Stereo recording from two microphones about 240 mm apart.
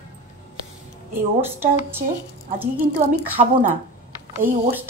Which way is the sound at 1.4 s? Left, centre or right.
Centre.